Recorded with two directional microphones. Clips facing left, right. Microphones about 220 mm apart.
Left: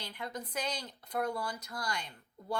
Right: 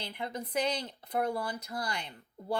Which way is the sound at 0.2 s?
25° right (ahead or behind).